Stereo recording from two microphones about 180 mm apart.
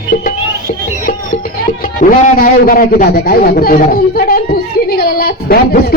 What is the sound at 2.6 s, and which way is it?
Speech, 55° left (ahead or behind).